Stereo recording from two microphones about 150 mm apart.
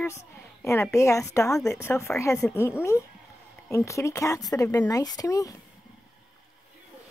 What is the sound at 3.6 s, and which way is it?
A woman's voice, 20° left (ahead or behind).